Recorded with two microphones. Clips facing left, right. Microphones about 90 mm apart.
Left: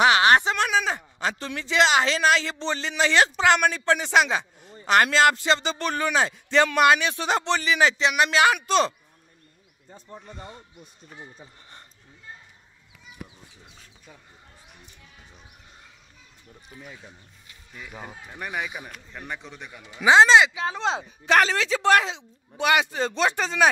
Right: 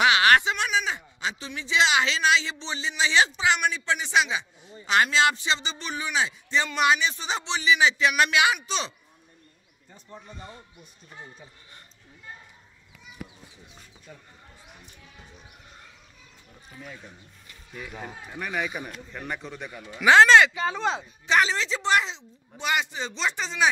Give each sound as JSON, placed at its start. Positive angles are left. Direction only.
{"t": 0.0, "sound": "speech", "side_deg": 30}
{"t": 17.9, "sound": "speech", "side_deg": 10}
{"t": 20.0, "sound": "speech", "side_deg": 20}
{"t": 21.0, "sound": "speech", "side_deg": 55}